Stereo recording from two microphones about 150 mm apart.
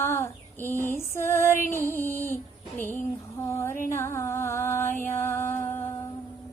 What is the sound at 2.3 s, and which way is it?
Female singing, 15° left (ahead or behind).